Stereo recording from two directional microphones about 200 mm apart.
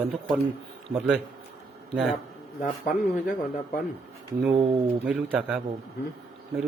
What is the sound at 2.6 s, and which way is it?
Speech, 40° left (ahead or behind).